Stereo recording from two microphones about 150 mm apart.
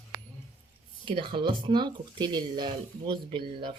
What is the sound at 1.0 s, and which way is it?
Speech, 35° right (ahead or behind).